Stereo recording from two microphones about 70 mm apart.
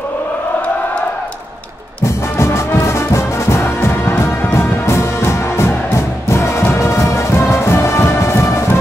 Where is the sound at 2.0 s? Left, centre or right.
Left.